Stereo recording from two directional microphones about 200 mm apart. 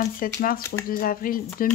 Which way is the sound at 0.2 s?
45° left (ahead or behind).